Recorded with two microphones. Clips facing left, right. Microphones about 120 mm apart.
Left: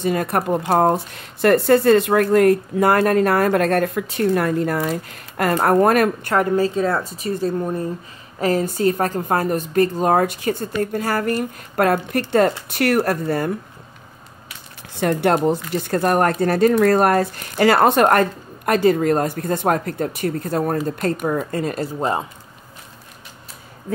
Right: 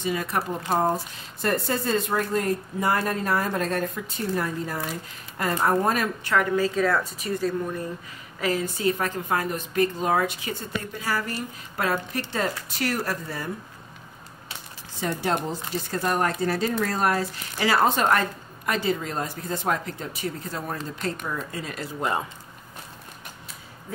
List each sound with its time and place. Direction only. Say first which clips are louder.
0.0 s a woman's voice: left 7 dB; 55° left (ahead or behind)
15.0 s a woman's voice: left 9 dB; 65° left (ahead or behind)